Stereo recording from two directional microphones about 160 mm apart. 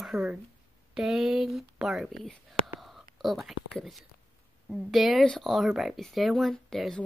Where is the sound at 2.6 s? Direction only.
5° right (ahead or behind).